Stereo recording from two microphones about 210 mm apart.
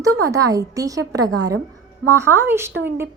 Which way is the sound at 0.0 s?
15° right (ahead or behind).